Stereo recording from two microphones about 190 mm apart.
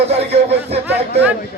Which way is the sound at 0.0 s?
35° right (ahead or behind).